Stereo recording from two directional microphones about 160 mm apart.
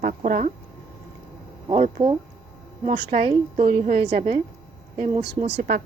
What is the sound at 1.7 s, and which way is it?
Speech, 50° right (ahead or behind).